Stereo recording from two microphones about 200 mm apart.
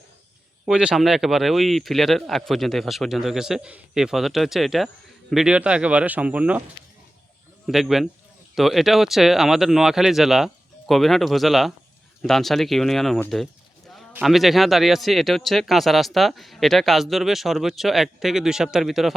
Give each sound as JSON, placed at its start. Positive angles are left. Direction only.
{"t": 0.6, "sound": "speech", "side_deg": -5}
{"t": 7.7, "sound": "speech", "side_deg": 0}